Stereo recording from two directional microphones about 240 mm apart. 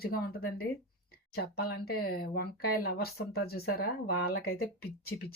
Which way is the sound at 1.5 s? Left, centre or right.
Left.